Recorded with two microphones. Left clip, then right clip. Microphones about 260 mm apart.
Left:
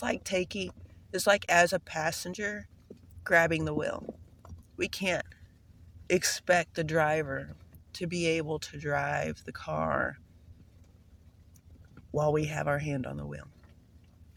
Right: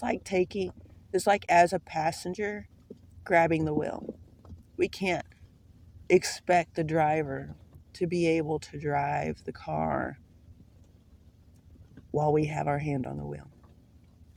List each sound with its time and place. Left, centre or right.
0.0 s speech: left
12.1 s speech: left